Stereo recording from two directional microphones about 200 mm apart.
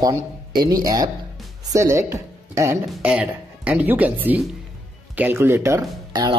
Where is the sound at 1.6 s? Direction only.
15° right (ahead or behind).